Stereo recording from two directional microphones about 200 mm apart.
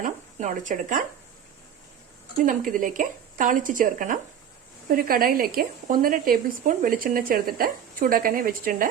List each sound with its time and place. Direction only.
0.0 s speech: 40° right (ahead or behind)
2.4 s a woman's voice: 40° right (ahead or behind)